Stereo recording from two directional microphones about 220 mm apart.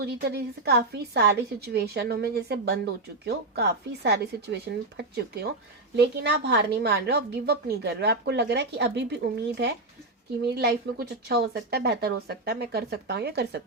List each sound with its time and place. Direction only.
0.0 s a woman's voice: 45° right (ahead or behind)